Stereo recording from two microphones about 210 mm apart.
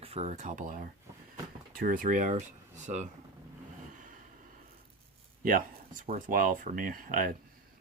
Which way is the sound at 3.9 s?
40° right (ahead or behind).